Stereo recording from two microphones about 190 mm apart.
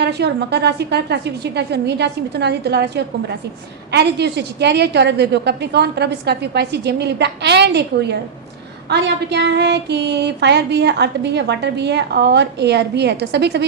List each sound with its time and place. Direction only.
0.0 s child singing: 60° right (ahead or behind)